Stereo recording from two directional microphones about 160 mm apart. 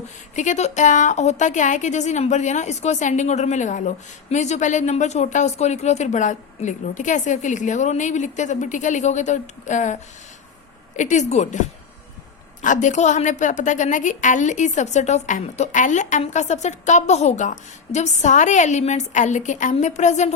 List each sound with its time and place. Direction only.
0.3 s a woman's voice: 45° left (ahead or behind)
12.6 s a woman's voice: 50° left (ahead or behind)